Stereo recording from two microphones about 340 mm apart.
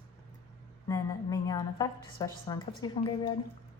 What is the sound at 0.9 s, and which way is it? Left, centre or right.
A woman's voice, centre.